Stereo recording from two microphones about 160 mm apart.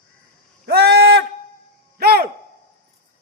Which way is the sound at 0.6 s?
85° right.